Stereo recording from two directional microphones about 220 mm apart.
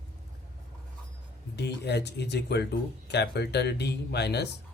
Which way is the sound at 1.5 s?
50° left (ahead or behind).